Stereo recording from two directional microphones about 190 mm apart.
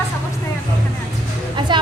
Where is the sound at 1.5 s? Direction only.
25° right (ahead or behind).